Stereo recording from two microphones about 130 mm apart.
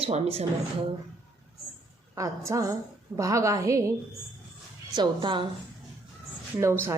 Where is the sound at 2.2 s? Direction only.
25° right (ahead or behind).